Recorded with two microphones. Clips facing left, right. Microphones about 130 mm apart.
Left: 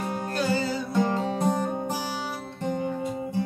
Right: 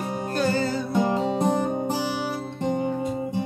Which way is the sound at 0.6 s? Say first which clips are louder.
Right 3 dB; 50° right (ahead or behind).